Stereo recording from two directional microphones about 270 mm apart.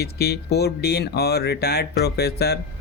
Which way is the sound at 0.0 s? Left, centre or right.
Left.